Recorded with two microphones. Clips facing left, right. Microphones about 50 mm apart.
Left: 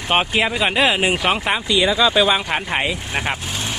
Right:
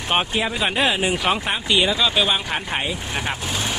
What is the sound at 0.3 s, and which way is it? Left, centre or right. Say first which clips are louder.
Speech: left 4 dB; left.